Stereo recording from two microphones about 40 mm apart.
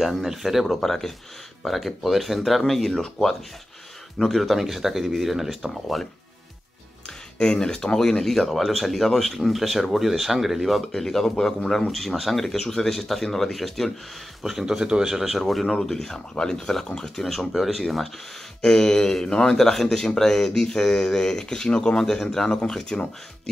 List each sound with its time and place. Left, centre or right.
0.0 s speech: centre
0.7 s speech: centre
7.3 s speech: centre
11.0 s speech: centre
11.3 s speech: centre
11.9 s speech: centre
15.4 s speech: centre
19.5 s speech: centre